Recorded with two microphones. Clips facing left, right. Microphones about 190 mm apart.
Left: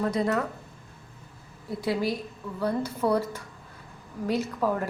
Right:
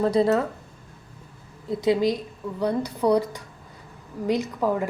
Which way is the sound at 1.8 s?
20° right (ahead or behind).